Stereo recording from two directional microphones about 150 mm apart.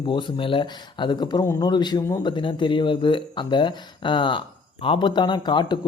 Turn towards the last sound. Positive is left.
turn(degrees=30)  # may be behind; listen again after turning